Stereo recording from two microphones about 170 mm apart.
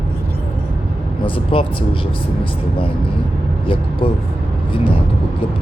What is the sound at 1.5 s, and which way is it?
Speech, 30° left (ahead or behind).